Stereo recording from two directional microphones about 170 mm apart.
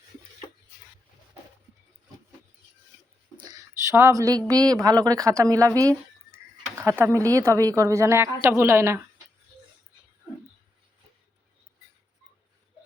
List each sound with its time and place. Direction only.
3.3 s a sound: 25° right (ahead or behind)
3.9 s a woman's voice: 15° right (ahead or behind)
7.0 s a woman's voice: 20° right (ahead or behind)